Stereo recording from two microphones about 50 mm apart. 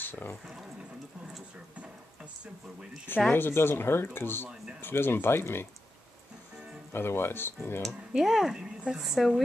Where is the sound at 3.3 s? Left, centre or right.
Left.